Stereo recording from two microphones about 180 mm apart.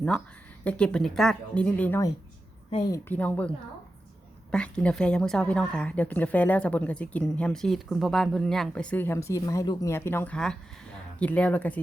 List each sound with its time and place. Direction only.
0.6 s a woman's voice: 5° left (ahead or behind)
2.6 s a woman's voice: 25° left (ahead or behind)
3.1 s a woman's voice: 10° left (ahead or behind)
4.5 s a woman's voice: 5° left (ahead or behind)